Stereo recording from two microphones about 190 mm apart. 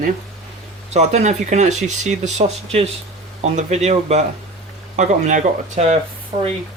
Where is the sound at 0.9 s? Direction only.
35° right (ahead or behind).